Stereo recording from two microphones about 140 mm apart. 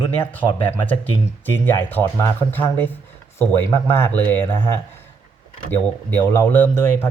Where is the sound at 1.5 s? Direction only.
15° left (ahead or behind).